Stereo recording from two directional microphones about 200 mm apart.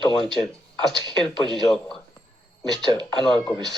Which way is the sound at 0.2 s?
5° left (ahead or behind).